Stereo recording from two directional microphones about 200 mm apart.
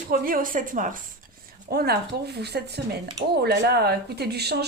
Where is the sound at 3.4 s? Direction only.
50° right (ahead or behind).